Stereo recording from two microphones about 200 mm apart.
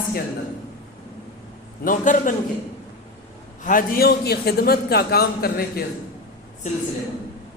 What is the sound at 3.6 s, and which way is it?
A man's voice, 45° left (ahead or behind).